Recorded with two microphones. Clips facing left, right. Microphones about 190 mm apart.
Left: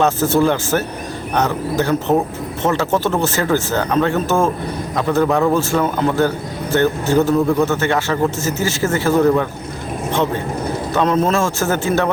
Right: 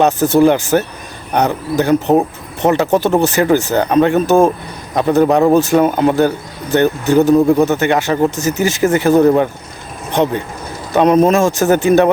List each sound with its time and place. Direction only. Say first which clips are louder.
0.0 s speech: right 4 dB; 15° right (ahead or behind)